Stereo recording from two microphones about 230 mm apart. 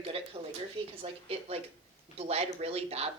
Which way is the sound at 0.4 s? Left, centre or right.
Right.